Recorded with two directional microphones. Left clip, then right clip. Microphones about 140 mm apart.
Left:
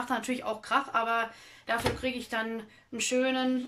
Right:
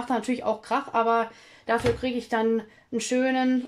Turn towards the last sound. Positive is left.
turn(degrees=-40)  # may be behind; listen again after turning